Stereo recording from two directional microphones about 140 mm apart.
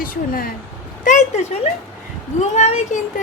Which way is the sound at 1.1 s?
65° left (ahead or behind).